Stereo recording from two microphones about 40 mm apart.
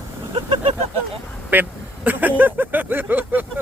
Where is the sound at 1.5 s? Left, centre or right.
Right.